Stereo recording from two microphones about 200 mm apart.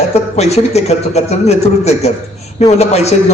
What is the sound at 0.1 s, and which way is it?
A man's voice, 35° left (ahead or behind).